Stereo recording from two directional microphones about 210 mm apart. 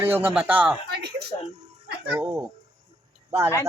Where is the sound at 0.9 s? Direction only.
50° right (ahead or behind).